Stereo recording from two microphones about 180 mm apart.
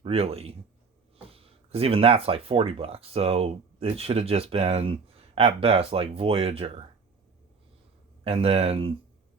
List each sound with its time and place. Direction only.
0.0 s speech: 35° right (ahead or behind)
8.2 s speech: 30° right (ahead or behind)